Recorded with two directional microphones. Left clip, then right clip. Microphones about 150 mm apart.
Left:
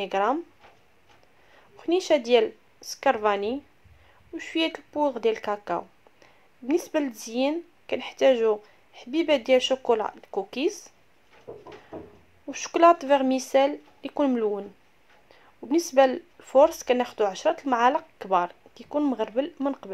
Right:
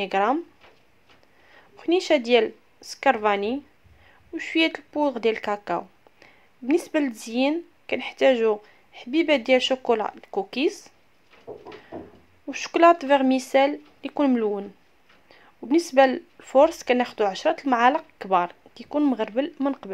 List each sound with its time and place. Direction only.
0.0 s speech: 20° right (ahead or behind)
1.8 s speech: 15° right (ahead or behind)
12.4 s speech: 15° right (ahead or behind)